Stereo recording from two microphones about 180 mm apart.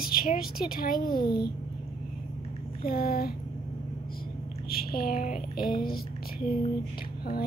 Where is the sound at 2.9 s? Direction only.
55° left (ahead or behind).